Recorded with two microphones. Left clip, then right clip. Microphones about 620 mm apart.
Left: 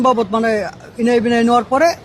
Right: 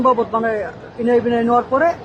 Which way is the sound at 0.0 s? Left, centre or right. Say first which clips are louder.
Left 1 dB; left.